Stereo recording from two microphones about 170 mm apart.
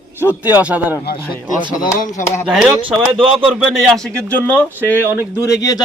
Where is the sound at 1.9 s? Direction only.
55° left (ahead or behind).